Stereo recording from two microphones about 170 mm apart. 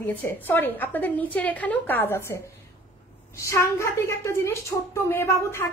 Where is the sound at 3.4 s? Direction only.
15° left (ahead or behind).